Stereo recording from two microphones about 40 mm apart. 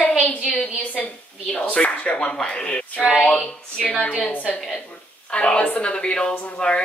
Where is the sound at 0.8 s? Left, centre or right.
Left.